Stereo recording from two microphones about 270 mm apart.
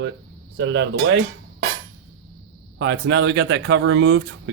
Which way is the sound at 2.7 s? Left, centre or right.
Right.